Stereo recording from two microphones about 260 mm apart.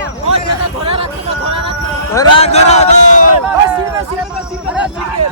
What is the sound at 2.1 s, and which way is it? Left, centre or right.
Speech, centre.